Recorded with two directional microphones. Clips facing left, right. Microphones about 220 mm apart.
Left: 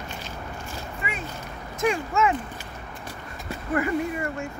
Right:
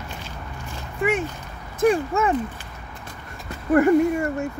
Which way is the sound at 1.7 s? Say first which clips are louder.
Right 5 dB; 35° right (ahead or behind).